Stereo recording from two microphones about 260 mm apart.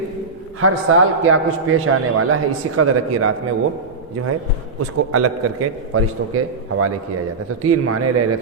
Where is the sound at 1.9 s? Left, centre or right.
Right.